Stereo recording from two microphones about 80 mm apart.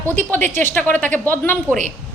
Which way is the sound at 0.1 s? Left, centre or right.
Left.